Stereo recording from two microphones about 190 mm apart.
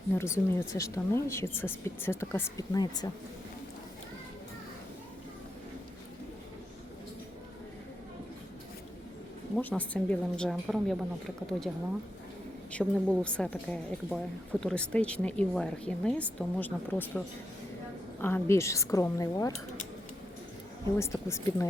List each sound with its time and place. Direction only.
0.1 s speech: 15° left (ahead or behind)
9.6 s a woman's voice: 10° left (ahead or behind)
12.7 s a woman's voice: 5° left (ahead or behind)
21.0 s speech: 15° left (ahead or behind)